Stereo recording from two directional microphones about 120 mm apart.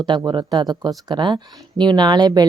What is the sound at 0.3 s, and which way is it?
Speech, 40° right (ahead or behind).